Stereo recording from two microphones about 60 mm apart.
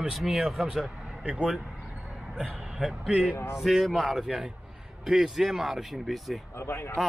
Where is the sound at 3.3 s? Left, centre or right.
Left.